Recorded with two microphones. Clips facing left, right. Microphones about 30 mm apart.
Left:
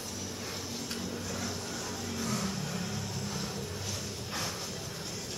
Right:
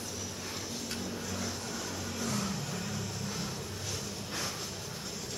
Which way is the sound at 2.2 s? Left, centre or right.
Centre.